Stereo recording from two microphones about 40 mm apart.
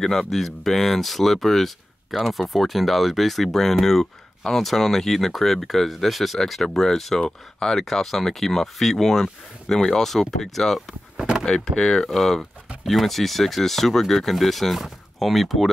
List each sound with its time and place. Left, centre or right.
0.0 s speech: centre
7.8 s speech: centre
11.4 s speech: centre